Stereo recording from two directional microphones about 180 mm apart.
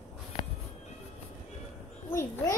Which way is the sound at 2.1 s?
15° left (ahead or behind).